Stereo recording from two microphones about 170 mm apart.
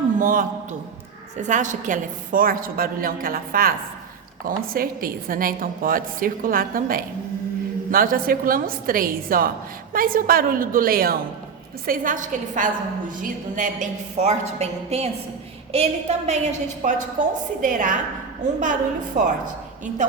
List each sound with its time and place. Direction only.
0.2 s a woman's voice: 50° right (ahead or behind)